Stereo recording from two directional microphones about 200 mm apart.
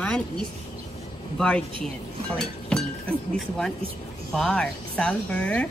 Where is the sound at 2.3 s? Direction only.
5° left (ahead or behind).